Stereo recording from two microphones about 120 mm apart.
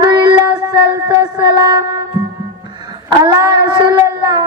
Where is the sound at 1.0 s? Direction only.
35° right (ahead or behind).